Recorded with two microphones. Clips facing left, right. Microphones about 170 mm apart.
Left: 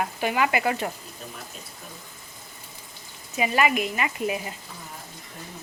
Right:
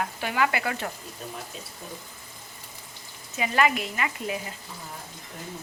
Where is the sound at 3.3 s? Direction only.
15° left (ahead or behind).